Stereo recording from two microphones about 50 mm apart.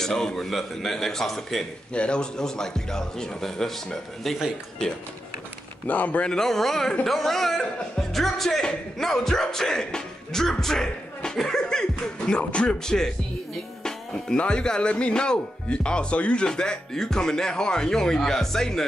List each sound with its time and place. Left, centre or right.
0.0 s a man's voice: centre
2.0 s a man's voice: centre
5.9 s speech: left
6.3 s a man's voice: centre
12.3 s speech: left
13.8 s music: centre
14.4 s a man's voice: centre